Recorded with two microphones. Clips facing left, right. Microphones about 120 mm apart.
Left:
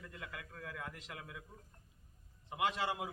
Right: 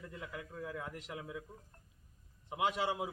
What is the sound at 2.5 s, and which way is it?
Speech, 15° right (ahead or behind).